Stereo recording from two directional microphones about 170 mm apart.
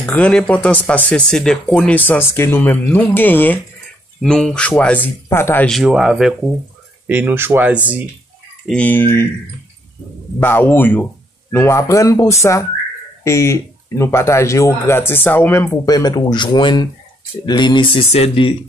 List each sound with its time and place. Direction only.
0.0 s speech: 5° left (ahead or behind)
5.8 s speech: 5° right (ahead or behind)
8.6 s speech: 10° left (ahead or behind)
10.4 s speech: 10° left (ahead or behind); by 18.5 s 35° left (ahead or behind)